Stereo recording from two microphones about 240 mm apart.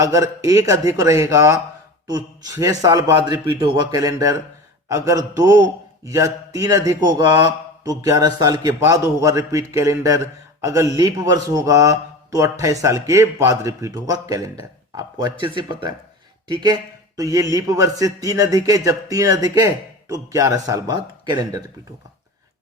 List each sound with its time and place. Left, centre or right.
0.0 s a man's voice: centre